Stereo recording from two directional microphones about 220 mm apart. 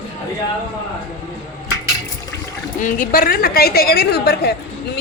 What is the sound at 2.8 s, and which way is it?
A woman's voice, 35° left (ahead or behind).